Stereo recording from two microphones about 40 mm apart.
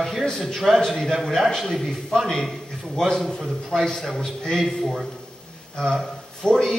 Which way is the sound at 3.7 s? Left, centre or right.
Left.